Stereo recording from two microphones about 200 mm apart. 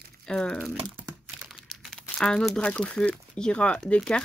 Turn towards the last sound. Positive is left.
turn(degrees=5)  # may be behind; listen again after turning